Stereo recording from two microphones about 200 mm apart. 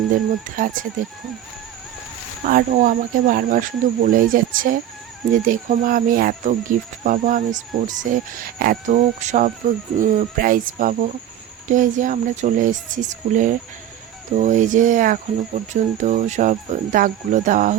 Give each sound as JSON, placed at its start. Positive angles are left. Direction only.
{"t": 0.5, "sound": "speech", "side_deg": -40}
{"t": 2.5, "sound": "speech", "side_deg": -45}